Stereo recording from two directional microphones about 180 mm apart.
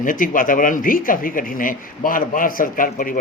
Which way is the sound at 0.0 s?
50° left (ahead or behind).